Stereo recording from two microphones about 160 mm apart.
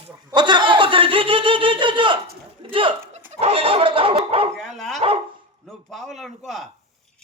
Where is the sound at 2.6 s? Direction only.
35° right (ahead or behind).